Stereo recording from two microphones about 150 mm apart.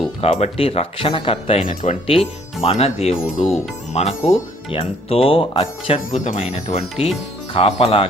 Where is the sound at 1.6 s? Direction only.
55° left (ahead or behind).